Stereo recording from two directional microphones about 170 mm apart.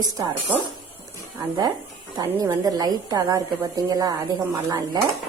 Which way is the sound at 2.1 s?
20° right (ahead or behind).